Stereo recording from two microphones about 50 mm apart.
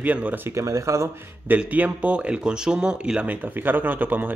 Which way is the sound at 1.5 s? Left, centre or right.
Right.